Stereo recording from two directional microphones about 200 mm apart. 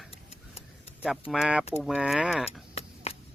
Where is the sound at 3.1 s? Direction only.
30° left (ahead or behind).